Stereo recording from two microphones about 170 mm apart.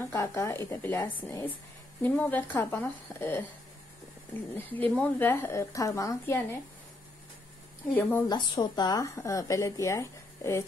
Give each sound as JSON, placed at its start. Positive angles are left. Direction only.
{"t": 0.0, "sound": "speech", "side_deg": 15}
{"t": 7.9, "sound": "speech", "side_deg": 10}
{"t": 8.3, "sound": "speech", "side_deg": 25}